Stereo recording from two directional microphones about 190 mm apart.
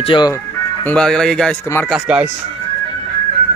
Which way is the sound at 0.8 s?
5° left (ahead or behind).